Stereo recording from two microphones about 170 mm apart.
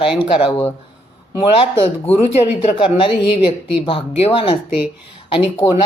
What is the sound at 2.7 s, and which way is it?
A woman's voice, 30° left (ahead or behind).